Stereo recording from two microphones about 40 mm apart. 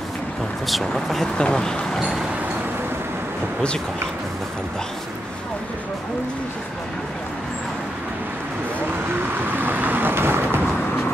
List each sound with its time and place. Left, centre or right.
0.7 s speech: centre
1.2 s speech: left
9.6 s vehicle: right